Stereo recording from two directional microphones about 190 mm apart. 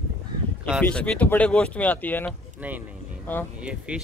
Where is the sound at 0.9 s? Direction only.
5° left (ahead or behind).